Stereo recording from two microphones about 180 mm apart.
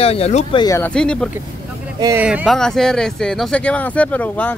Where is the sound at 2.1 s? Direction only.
5° right (ahead or behind); by 4.5 s 10° left (ahead or behind).